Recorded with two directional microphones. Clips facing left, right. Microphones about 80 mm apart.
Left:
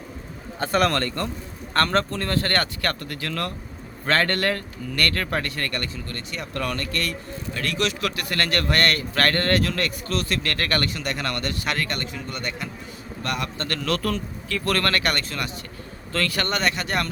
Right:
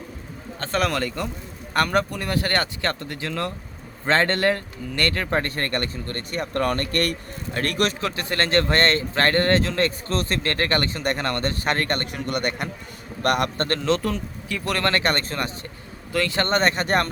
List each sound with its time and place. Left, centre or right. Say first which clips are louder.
0.6 s a man's voice: left 2 dB; centre
5.4 s speech: right 3 dB; right
8.0 s a man's voice: right 1 dB; right
11.0 s speech: right 3 dB; right
12.1 s a man's voice: right 6 dB; right
13.7 s a man's voice: right 3 dB; right
16.1 s speech: right 3 dB; right